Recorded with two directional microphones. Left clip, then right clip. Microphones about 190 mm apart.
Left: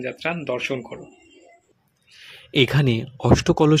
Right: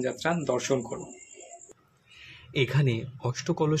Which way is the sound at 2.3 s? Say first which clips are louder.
Left 9 dB; 40° left (ahead or behind).